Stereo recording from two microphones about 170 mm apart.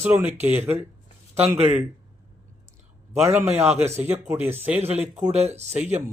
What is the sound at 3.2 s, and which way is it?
Speech, 10° right (ahead or behind).